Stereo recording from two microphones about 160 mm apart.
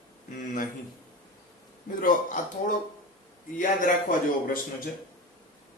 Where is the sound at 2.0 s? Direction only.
55° left (ahead or behind).